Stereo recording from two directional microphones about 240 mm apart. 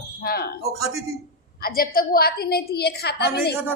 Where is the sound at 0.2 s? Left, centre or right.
Left.